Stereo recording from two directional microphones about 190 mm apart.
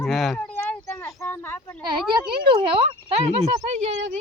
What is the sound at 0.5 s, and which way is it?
Speech, 15° left (ahead or behind).